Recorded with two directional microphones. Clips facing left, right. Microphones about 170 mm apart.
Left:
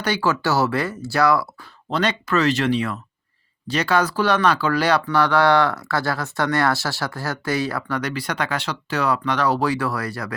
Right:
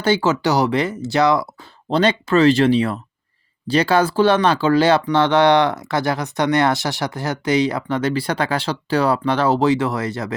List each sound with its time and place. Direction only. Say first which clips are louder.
0.0 s speech: right 4 dB; 25° right (ahead or behind)